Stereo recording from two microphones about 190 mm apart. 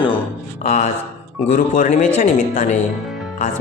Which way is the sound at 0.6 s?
40° left (ahead or behind).